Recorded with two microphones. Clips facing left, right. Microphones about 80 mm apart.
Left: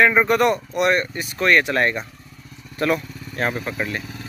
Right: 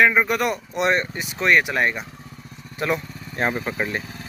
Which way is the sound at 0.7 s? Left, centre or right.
Right.